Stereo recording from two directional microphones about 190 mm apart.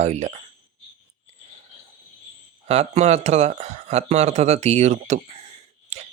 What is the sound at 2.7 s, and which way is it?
Speech, 35° right (ahead or behind).